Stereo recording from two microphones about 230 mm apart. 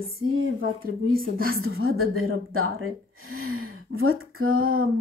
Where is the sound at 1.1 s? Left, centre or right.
Right.